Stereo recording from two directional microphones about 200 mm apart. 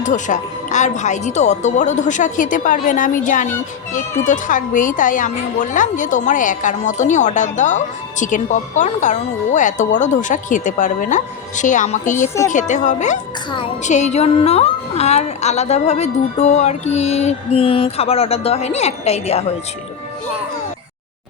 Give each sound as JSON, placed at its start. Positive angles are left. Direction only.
{"t": 0.0, "sound": "a woman's voice", "side_deg": 40}